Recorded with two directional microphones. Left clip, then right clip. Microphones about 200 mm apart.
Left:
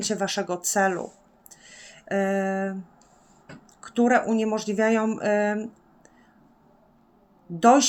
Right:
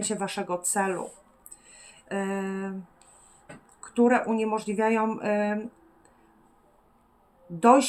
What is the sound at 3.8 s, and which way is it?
Speech, 30° left (ahead or behind).